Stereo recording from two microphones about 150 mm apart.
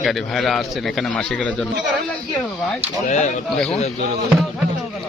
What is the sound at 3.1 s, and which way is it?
Speech, 55° left (ahead or behind).